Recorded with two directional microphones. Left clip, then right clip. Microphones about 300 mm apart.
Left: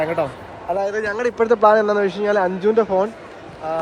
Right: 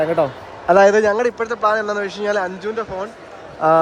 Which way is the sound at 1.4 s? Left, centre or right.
Centre.